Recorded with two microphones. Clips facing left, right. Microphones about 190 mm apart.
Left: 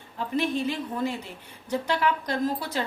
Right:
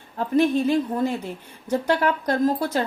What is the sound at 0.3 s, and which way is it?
Speech, 45° right (ahead or behind).